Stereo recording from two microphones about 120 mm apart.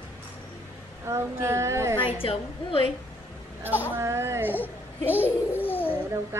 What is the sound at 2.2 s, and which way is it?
Speech, 50° left (ahead or behind).